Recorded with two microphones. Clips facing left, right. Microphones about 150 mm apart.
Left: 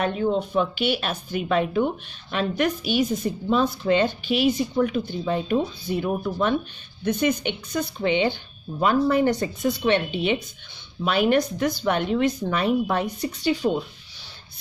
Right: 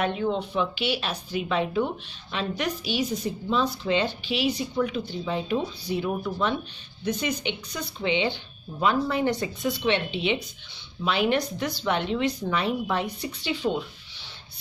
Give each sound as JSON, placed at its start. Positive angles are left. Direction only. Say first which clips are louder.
{"t": 0.0, "sound": "a woman's voice", "louder": "left 3 dB", "side_deg": 40}